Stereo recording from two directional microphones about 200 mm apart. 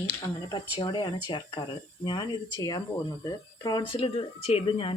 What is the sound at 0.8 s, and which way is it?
Speech, 25° left (ahead or behind).